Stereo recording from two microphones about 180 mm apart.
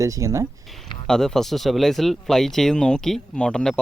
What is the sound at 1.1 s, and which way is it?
Speech, 5° left (ahead or behind).